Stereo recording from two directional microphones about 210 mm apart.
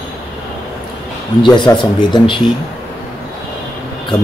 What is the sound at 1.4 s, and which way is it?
Speech, 20° left (ahead or behind).